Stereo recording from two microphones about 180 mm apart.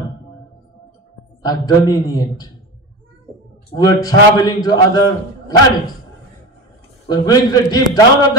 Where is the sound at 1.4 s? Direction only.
25° left (ahead or behind).